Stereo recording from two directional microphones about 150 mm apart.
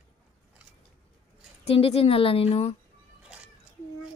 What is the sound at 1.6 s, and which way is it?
Speech, 40° left (ahead or behind).